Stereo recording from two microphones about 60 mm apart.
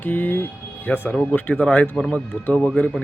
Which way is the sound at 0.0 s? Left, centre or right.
Left.